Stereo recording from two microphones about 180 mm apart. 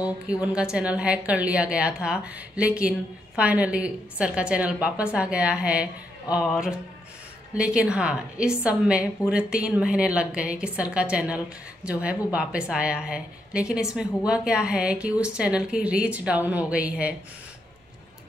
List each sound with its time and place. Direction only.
0.0 s a woman's voice: 5° right (ahead or behind)